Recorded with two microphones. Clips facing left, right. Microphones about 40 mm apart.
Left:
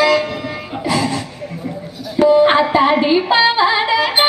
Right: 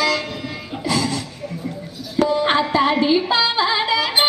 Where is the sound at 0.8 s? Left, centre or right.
Left.